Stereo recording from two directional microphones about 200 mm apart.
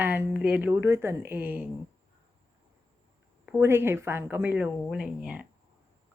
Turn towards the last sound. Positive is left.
turn(degrees=-5)  # may be behind; listen again after turning